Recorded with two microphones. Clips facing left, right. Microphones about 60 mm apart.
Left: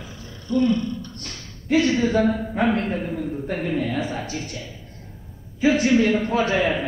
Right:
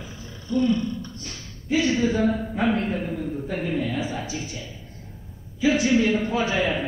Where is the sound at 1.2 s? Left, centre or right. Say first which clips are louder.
Left 3 dB; left.